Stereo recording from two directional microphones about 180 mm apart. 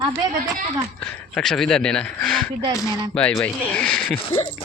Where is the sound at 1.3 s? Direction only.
Centre (ahead or behind).